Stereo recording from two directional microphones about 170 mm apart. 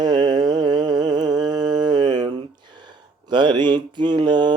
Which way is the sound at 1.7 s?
25° right (ahead or behind).